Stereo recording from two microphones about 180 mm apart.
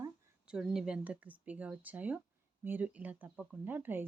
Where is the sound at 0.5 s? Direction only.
5° right (ahead or behind).